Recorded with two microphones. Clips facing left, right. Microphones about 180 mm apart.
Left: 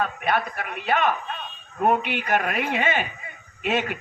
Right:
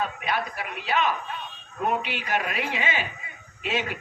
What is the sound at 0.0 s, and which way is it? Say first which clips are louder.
A man's voice: left 4 dB; 55° left (ahead or behind).